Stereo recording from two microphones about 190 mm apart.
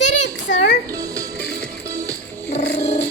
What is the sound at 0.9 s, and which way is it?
Music, 20° right (ahead or behind).